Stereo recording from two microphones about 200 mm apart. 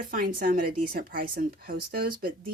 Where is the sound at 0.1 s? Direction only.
40° right (ahead or behind).